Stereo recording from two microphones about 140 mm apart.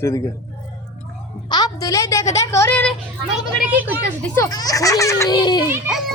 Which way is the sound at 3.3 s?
5° right (ahead or behind).